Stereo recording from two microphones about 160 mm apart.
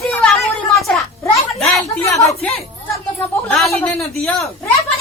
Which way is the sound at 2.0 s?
20° left (ahead or behind).